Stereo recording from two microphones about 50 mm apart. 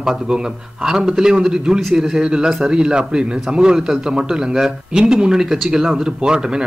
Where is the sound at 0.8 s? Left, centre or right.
Centre.